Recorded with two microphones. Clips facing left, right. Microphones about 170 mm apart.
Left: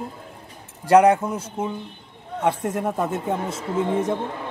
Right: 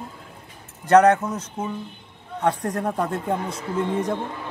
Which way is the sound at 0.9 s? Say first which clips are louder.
Even; 10° left (ahead or behind).